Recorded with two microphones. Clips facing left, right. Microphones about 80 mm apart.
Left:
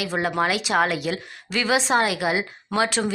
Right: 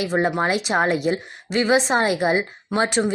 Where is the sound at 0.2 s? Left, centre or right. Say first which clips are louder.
Right 1 dB; right.